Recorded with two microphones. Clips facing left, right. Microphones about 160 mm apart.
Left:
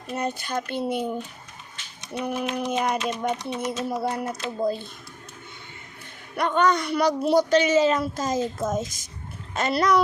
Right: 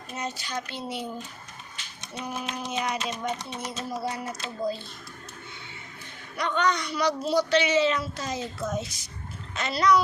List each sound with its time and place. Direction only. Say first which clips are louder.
0.1 s speech: left 6 dB; 55° left (ahead or behind)
2.1 s speech: left 7 dB; 55° left (ahead or behind)
6.3 s speech: left 5 dB; 50° left (ahead or behind)